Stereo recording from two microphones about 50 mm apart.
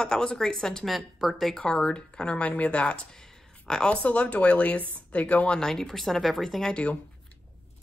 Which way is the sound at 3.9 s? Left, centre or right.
Left.